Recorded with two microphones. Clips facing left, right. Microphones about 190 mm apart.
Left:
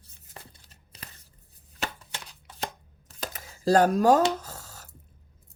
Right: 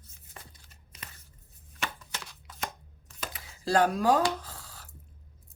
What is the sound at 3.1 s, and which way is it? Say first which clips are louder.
Camera: left 3 dB; 40° left (ahead or behind).